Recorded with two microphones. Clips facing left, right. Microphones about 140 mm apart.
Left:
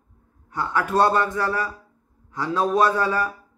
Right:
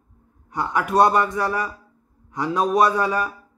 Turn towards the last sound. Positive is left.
turn(degrees=-15)  # may be behind; listen again after turning